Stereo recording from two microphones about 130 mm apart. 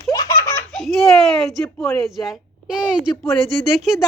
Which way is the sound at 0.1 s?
25° left (ahead or behind).